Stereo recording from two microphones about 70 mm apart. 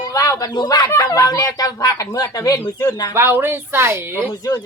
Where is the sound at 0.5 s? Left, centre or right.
Left.